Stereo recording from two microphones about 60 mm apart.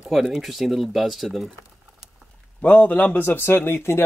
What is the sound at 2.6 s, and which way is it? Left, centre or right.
A man's voice, left.